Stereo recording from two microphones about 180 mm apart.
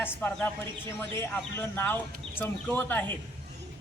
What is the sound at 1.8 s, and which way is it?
Speech, 10° left (ahead or behind).